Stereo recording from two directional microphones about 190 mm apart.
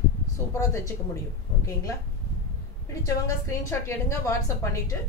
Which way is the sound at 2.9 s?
15° left (ahead or behind).